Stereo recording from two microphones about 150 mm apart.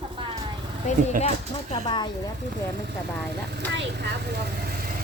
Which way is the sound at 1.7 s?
30° left (ahead or behind).